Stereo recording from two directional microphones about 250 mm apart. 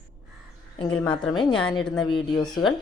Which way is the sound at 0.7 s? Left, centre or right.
Centre.